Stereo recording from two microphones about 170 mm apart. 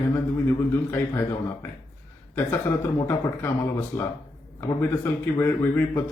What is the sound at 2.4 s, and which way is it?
A man's voice, 25° left (ahead or behind).